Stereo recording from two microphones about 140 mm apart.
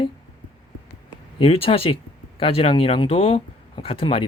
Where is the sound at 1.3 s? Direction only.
40° left (ahead or behind).